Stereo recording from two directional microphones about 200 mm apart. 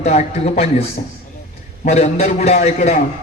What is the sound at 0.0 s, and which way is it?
A man's voice, 35° left (ahead or behind).